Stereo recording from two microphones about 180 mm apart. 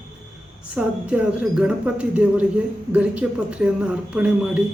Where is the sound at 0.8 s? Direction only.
5° right (ahead or behind).